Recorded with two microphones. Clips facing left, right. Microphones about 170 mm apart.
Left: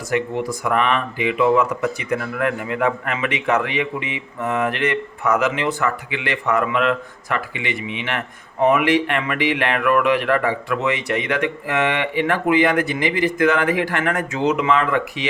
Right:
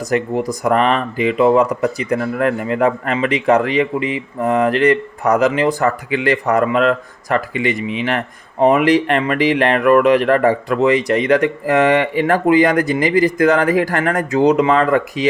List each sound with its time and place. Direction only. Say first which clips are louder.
0.1 s speech: right 3 dB; 40° right (ahead or behind)